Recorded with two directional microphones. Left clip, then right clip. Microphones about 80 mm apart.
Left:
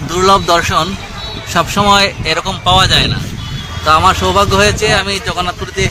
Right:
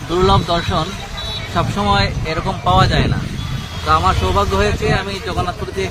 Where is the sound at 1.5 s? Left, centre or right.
Left.